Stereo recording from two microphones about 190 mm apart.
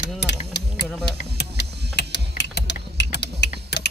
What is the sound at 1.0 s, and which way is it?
Music, 65° left (ahead or behind).